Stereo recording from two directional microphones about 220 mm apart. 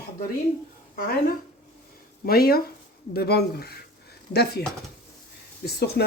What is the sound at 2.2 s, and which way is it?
Speech, 45° left (ahead or behind).